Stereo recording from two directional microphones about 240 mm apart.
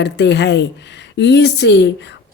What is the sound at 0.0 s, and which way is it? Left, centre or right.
Speech, left.